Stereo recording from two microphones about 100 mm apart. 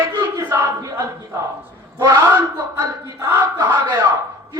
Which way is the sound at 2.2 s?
20° right (ahead or behind).